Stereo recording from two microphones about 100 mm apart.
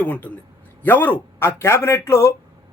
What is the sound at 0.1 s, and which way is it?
A man's voice, 15° left (ahead or behind).